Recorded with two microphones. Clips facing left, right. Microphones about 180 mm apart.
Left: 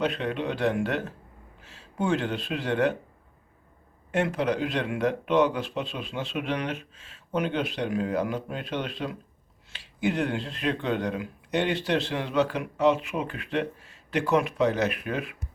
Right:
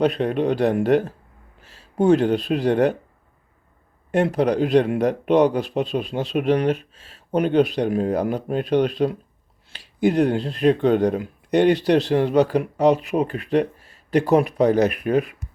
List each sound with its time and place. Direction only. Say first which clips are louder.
0.0 s speech: right 8 dB; 40° right (ahead or behind)
4.1 s speech: right 7 dB; 40° right (ahead or behind)